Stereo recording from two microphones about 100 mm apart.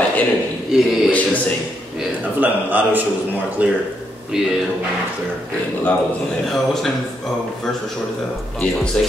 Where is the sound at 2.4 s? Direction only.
20° right (ahead or behind).